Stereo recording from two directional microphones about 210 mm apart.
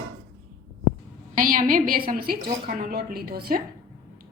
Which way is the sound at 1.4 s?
40° right (ahead or behind).